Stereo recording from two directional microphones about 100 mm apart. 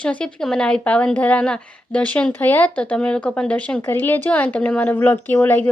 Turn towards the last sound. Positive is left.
turn(degrees=20)  # may be behind; listen again after turning